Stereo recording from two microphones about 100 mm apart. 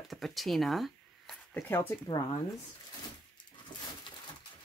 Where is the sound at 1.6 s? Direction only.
25° left (ahead or behind).